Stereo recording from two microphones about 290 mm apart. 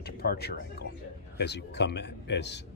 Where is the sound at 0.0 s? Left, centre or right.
Left.